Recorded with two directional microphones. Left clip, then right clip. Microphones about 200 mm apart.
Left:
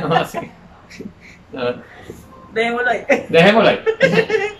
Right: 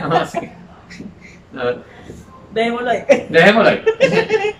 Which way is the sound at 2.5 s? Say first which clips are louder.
Even; 10° right (ahead or behind).